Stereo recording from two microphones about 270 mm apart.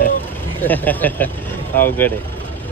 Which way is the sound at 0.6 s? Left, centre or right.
Centre.